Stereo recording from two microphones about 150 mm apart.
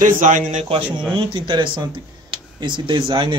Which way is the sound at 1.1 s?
35° right (ahead or behind).